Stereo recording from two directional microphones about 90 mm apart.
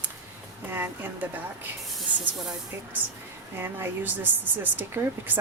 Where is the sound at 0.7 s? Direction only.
25° right (ahead or behind).